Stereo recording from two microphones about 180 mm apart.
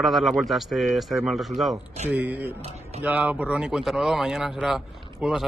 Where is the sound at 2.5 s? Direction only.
35° right (ahead or behind).